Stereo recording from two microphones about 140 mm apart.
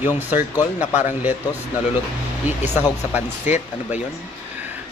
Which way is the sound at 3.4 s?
55° left (ahead or behind).